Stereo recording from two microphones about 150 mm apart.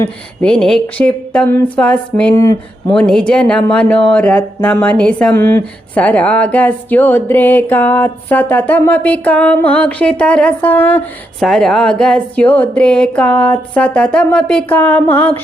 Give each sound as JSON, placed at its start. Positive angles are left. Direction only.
{"t": 0.0, "sound": "speech", "side_deg": 5}
{"t": 2.3, "sound": "speech", "side_deg": 20}
{"t": 2.9, "sound": "speech", "side_deg": 5}
{"t": 11.3, "sound": "speech", "side_deg": 0}